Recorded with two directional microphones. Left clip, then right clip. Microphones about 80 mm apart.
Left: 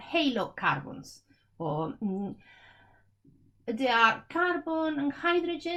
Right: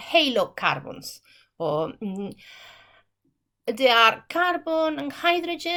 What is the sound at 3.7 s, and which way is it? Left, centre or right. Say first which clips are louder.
A woman's voice: right 6 dB; right.